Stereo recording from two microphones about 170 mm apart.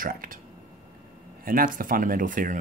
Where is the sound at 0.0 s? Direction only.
55° right (ahead or behind).